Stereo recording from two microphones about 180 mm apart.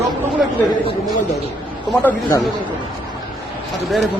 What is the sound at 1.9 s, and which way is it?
Speech, 10° left (ahead or behind).